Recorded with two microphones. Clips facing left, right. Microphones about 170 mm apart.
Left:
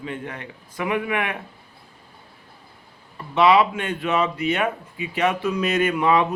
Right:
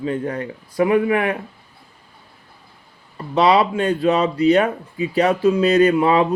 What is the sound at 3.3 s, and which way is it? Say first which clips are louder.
Speech: right 2 dB; 35° right (ahead or behind).